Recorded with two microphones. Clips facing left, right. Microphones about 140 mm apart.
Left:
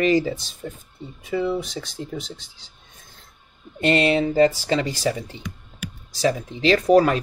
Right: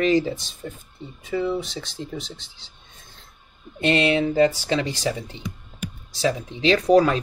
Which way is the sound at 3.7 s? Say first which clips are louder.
Left 1 dB; 40° left (ahead or behind).